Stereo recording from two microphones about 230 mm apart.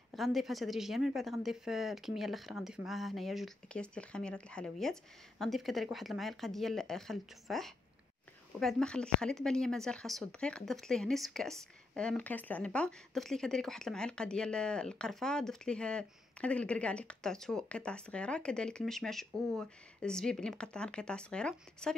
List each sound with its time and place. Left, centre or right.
0.1 s speech: centre